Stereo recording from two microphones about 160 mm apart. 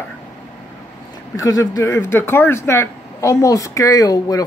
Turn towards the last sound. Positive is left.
turn(degrees=25)  # may be behind; listen again after turning